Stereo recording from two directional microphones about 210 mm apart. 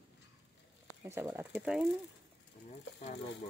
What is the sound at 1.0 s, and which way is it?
Speech, 10° right (ahead or behind).